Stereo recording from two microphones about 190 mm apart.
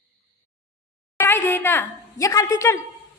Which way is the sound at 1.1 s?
10° left (ahead or behind).